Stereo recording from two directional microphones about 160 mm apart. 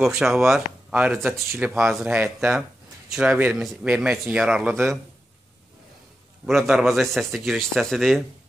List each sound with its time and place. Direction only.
0.0 s a man's voice: 5° right (ahead or behind)
6.4 s a man's voice: centre (ahead or behind)